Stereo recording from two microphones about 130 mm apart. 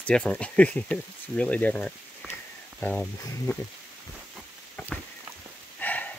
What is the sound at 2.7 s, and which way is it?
Speech, 10° left (ahead or behind).